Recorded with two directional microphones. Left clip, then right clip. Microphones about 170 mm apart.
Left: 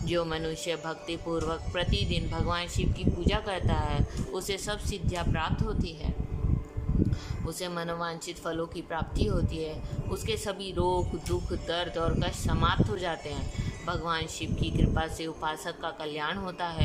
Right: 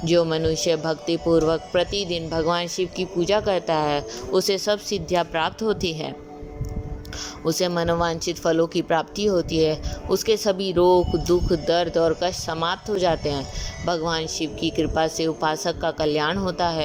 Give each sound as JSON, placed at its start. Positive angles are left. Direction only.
{"t": 0.0, "sound": "speech", "side_deg": -30}
{"t": 7.4, "sound": "speech", "side_deg": -40}